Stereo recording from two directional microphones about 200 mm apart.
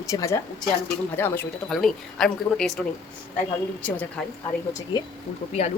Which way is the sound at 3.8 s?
5° left (ahead or behind).